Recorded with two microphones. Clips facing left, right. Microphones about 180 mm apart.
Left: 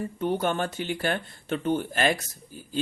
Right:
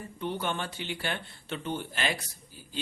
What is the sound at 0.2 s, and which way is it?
A man's voice, 45° left (ahead or behind).